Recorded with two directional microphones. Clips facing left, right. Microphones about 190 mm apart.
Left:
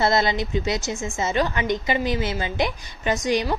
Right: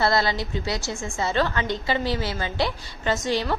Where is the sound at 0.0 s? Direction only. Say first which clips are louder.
Left 2 dB; 20° left (ahead or behind).